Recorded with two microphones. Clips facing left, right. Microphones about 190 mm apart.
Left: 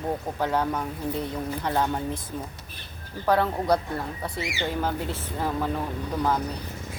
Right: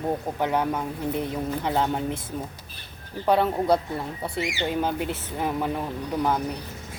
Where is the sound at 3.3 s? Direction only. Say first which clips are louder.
Right 2 dB; 20° right (ahead or behind).